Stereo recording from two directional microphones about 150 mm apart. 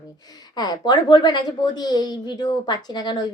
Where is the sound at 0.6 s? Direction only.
25° left (ahead or behind).